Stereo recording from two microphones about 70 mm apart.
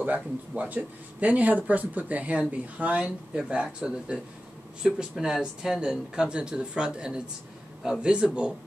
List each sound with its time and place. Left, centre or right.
0.0 s speech: right